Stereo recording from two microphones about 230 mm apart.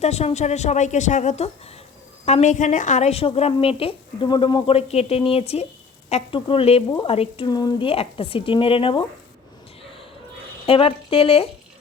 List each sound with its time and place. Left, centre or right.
0.0 s a woman's voice: left
10.7 s a woman's voice: left